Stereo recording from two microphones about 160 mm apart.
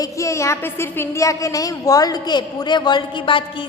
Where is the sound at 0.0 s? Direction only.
20° left (ahead or behind).